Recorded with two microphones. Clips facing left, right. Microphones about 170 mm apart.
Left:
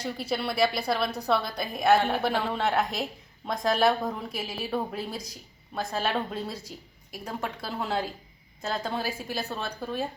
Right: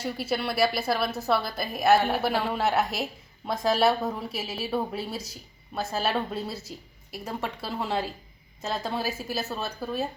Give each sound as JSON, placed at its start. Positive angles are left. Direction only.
{"t": 0.0, "sound": "a woman's voice", "side_deg": -5}